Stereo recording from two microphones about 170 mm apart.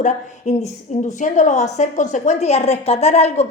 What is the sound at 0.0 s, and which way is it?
A woman's voice, 45° left (ahead or behind).